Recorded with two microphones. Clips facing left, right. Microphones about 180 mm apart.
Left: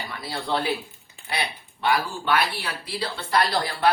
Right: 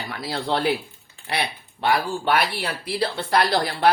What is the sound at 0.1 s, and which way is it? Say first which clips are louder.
Speech: right 3 dB; 80° right.